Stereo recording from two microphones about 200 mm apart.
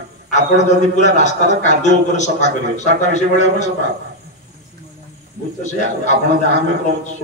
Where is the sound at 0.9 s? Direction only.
35° left (ahead or behind).